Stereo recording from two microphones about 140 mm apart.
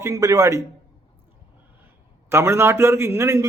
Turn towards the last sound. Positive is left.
turn(degrees=-20)  # may be behind; listen again after turning